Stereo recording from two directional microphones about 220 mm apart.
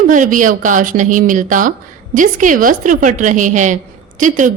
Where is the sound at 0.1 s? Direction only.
35° right (ahead or behind).